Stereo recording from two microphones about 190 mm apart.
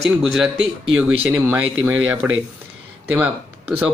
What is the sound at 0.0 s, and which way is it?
Speech, centre (ahead or behind).